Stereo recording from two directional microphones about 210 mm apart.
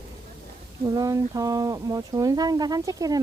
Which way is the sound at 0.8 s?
15° right (ahead or behind).